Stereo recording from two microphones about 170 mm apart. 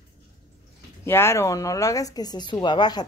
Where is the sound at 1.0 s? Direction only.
15° left (ahead or behind).